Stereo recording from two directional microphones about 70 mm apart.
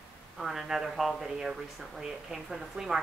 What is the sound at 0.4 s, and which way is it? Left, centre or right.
A woman's voice, centre.